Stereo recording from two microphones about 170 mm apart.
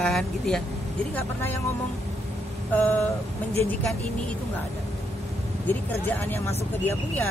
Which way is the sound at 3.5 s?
10° left (ahead or behind).